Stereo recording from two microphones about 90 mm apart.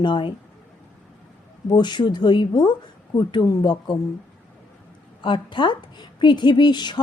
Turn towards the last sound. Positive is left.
turn(degrees=55)  # may be behind; listen again after turning